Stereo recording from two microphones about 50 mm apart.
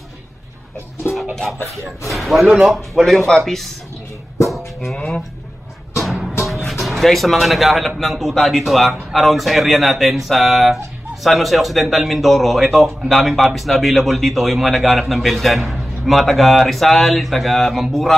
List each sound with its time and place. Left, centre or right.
1.3 s a man's voice: centre
4.9 s speech: centre
6.7 s a man's voice: centre